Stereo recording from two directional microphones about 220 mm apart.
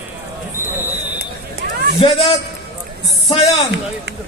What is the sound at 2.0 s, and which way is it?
Speech, 25° left (ahead or behind).